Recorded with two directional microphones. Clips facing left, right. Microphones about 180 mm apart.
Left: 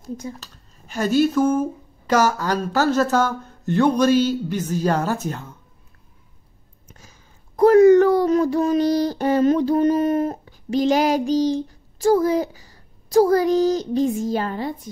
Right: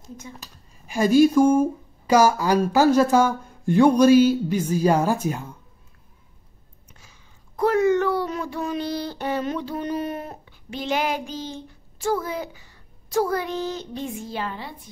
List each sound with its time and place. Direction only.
0.4 s speech: 10° right (ahead or behind)
6.9 s speech: 40° left (ahead or behind)